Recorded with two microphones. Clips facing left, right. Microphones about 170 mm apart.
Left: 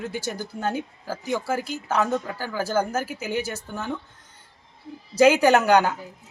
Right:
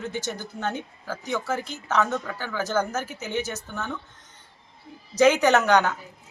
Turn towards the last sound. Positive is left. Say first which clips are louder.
# left 2 dB
turn(degrees=10)  # may be behind; listen again after turning